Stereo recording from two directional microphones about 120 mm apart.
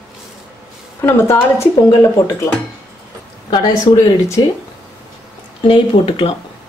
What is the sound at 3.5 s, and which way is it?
Speech, 30° left (ahead or behind).